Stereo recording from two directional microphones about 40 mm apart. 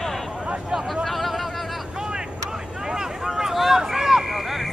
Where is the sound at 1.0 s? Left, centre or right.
Centre.